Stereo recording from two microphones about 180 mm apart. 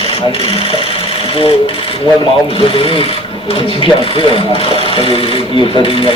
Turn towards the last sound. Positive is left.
turn(degrees=30)  # may be behind; listen again after turning